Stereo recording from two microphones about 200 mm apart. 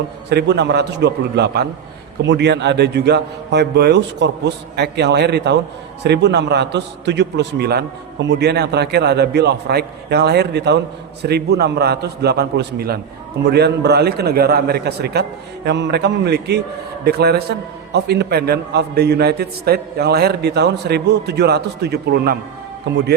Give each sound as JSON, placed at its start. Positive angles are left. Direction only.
{"t": 0.3, "sound": "a man's voice", "side_deg": -55}